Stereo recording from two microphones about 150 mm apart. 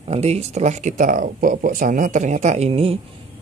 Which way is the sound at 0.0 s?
45° right (ahead or behind).